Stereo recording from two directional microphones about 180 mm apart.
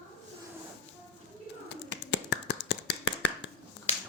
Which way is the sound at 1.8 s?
80° left.